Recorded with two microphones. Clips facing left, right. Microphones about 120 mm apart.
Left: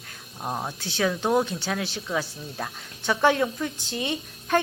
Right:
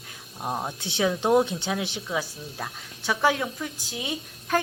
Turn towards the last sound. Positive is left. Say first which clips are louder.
# left 2 dB
turn(degrees=0)  # may be behind; listen again after turning